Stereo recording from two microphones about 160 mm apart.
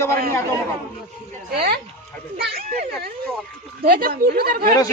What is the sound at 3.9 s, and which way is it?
Speech, 65° right (ahead or behind).